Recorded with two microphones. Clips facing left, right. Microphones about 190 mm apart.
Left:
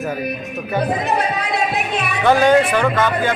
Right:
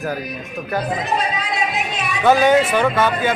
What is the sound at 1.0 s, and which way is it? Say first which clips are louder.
Music: left 2 dB; 60° left (ahead or behind).